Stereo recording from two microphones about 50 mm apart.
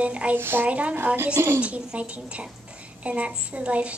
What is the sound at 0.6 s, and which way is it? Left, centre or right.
A woman's voice, right.